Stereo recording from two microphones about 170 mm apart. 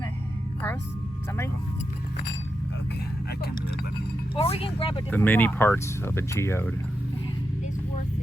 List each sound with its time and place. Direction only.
4.4 s speech: 35° left (ahead or behind)
5.1 s speech: 10° left (ahead or behind)